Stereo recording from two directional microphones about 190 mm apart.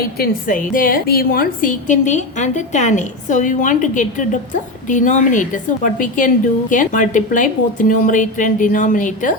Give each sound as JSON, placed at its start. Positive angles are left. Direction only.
{"t": 0.2, "sound": "a woman's voice", "side_deg": 45}